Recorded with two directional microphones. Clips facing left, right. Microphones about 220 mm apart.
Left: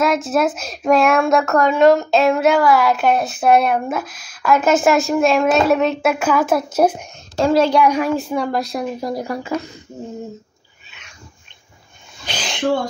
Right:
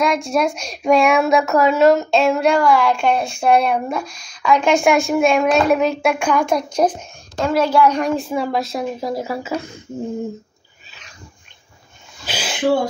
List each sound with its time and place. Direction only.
0.0 s speech: 5° left (ahead or behind)
7.4 s a woman's voice: 30° left (ahead or behind)
7.8 s a woman's voice: 10° left (ahead or behind)
8.1 s speech: centre (ahead or behind)
12.3 s owl: 5° right (ahead or behind)